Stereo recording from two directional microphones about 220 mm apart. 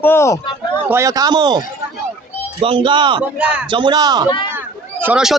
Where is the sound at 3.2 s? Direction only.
5° right (ahead or behind).